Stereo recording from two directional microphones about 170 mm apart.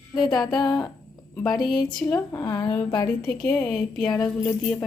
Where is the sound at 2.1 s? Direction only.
20° left (ahead or behind).